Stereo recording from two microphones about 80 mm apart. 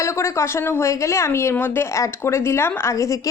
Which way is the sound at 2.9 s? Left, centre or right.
Left.